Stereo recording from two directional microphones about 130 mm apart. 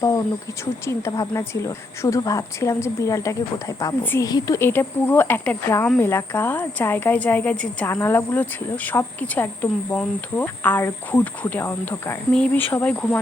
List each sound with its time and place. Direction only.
0.0 s a woman's voice: 25° left (ahead or behind); by 13.1 s 10° left (ahead or behind)